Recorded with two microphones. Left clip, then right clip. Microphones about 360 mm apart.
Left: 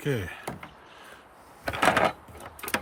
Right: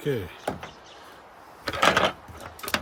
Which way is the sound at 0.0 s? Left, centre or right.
Left.